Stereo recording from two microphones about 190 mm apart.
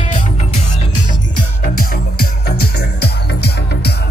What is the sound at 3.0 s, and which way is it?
Music, 60° left (ahead or behind).